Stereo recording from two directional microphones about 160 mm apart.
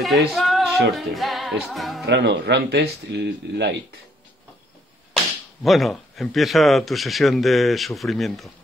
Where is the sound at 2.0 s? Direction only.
90° right.